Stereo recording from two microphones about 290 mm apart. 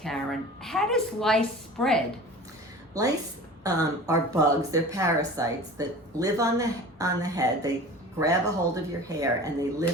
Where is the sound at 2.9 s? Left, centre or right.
Centre.